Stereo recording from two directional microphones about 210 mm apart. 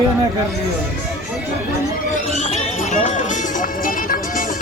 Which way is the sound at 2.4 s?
30° left (ahead or behind).